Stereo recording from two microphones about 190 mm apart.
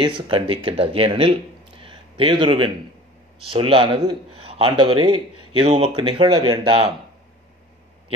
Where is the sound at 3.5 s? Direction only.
30° right (ahead or behind).